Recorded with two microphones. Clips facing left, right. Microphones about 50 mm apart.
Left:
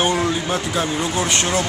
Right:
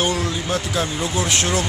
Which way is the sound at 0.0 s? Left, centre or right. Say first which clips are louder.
Left 3 dB; centre.